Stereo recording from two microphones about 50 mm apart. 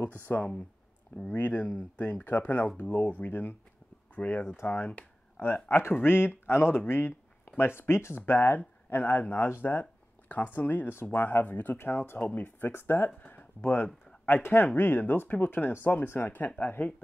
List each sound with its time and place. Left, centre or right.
0.3 s speech: left
11.2 s speech: left
11.8 s speech: left
12.2 s speech: left
12.4 s speech: left
13.4 s a sound: left
13.7 s speech: left